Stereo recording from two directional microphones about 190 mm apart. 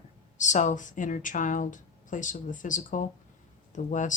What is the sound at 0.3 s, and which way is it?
Speech, 40° left (ahead or behind).